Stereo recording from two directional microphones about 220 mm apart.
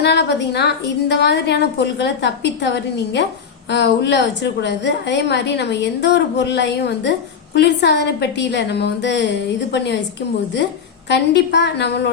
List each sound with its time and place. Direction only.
0.0 s a woman's voice: 50° left (ahead or behind)